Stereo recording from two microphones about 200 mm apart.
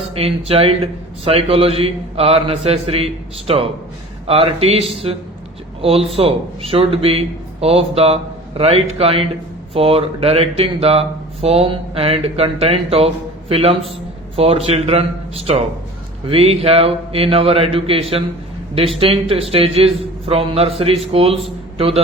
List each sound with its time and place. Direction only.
0.2 s speech: 30° right (ahead or behind)
16.2 s speech: 30° right (ahead or behind)